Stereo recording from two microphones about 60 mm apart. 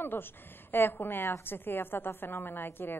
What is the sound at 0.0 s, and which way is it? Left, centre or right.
A woman's voice, left.